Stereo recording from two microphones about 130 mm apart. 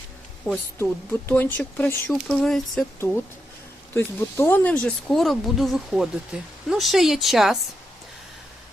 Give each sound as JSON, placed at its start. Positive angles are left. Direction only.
{"t": 0.4, "sound": "speech", "side_deg": 15}
{"t": 3.0, "sound": "speech", "side_deg": 20}